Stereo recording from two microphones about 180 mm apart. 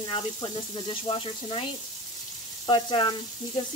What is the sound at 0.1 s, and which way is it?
Speech, 25° left (ahead or behind).